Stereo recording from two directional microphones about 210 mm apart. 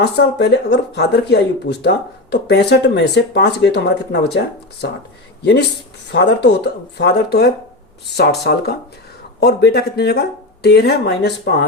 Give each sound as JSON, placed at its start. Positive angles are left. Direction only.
{"t": 0.0, "sound": "speech", "side_deg": 50}
{"t": 5.4, "sound": "speech", "side_deg": 50}